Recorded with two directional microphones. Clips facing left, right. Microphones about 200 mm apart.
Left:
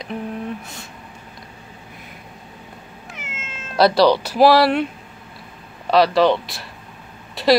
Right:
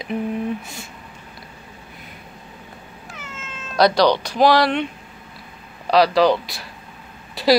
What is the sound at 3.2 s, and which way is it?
Cat, 25° left (ahead or behind).